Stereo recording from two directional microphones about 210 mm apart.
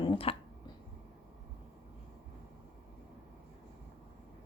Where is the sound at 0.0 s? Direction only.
25° left (ahead or behind).